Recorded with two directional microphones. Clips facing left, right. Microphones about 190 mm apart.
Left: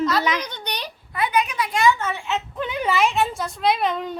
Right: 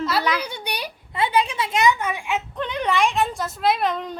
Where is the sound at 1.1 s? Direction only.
30° right (ahead or behind); by 2.4 s 10° right (ahead or behind).